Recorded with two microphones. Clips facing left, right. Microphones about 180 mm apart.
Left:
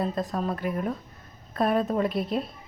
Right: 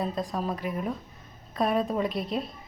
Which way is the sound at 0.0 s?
Centre (ahead or behind).